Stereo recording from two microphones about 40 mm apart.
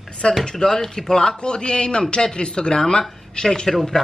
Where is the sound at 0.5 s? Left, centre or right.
Centre.